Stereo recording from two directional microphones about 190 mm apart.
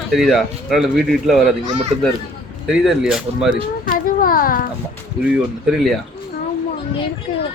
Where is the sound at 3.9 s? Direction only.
50° left (ahead or behind).